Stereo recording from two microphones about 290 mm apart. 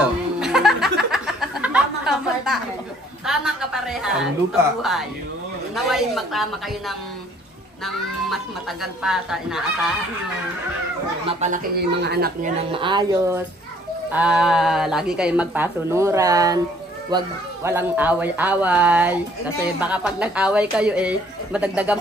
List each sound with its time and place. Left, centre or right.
0.0 s a sound: centre
3.3 s speech: centre
8.8 s speech: centre
11.2 s speech: right
12.7 s speech: centre
14.1 s speech: centre
17.6 s speech: centre